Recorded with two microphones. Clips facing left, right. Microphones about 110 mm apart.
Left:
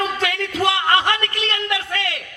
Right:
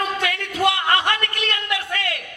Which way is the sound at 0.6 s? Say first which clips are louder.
Left 1 dB; 30° left (ahead or behind).